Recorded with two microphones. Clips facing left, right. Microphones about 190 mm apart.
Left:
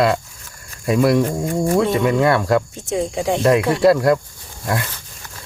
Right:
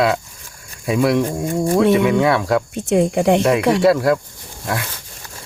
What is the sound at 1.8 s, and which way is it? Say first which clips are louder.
Speech: right 4 dB; 70° right (ahead or behind).